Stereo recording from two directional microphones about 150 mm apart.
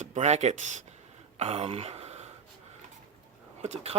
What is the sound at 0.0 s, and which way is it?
Speech, 50° right (ahead or behind).